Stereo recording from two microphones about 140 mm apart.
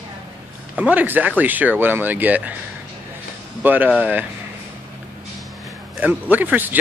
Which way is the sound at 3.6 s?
15° right (ahead or behind).